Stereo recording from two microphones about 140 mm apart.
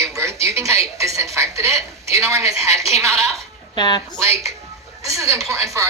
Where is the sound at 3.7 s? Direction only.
30° left (ahead or behind).